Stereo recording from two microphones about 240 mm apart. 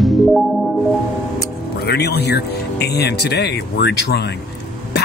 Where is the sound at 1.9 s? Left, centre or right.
Left.